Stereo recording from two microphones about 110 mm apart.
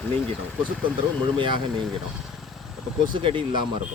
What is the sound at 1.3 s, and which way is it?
Speech, 50° right (ahead or behind).